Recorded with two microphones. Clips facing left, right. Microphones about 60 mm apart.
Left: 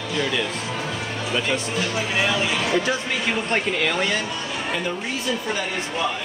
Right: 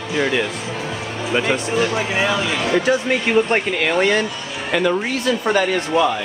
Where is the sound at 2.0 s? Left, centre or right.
Right.